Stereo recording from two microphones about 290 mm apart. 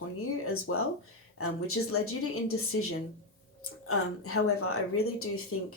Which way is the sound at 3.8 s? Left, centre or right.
Left.